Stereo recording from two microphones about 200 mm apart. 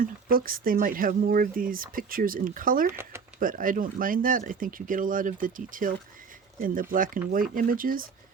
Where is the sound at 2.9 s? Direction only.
10° right (ahead or behind).